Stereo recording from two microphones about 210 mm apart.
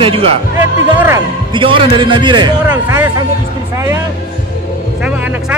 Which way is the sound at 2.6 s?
10° right (ahead or behind).